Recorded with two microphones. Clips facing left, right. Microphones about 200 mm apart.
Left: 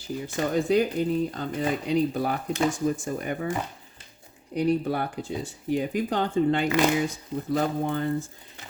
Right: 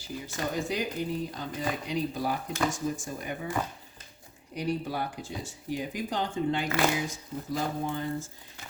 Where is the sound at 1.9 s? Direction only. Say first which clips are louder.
Left 6 dB; 60° left (ahead or behind).